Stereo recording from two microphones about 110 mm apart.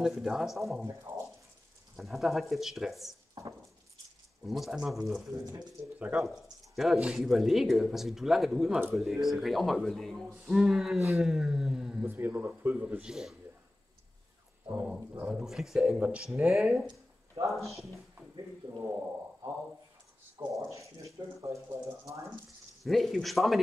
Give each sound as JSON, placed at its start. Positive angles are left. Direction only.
{"t": 0.0, "sound": "speech", "side_deg": 0}
{"t": 0.8, "sound": "speech", "side_deg": -25}
{"t": 2.0, "sound": "speech", "side_deg": 0}
{"t": 3.4, "sound": "a sound", "side_deg": -30}
{"t": 4.5, "sound": "speech", "side_deg": 0}
{"t": 12.1, "sound": "speech", "side_deg": -20}
{"t": 14.7, "sound": "speech", "side_deg": -15}
{"t": 18.6, "sound": "speech", "side_deg": -45}
{"t": 20.3, "sound": "speech", "side_deg": -30}
{"t": 22.8, "sound": "speech", "side_deg": 0}